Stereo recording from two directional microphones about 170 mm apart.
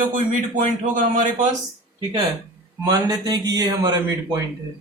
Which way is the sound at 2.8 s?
25° right (ahead or behind).